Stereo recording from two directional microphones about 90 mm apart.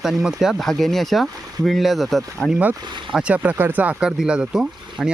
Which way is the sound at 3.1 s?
15° right (ahead or behind).